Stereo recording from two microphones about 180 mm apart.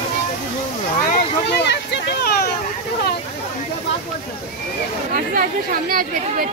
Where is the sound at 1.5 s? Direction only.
70° left (ahead or behind).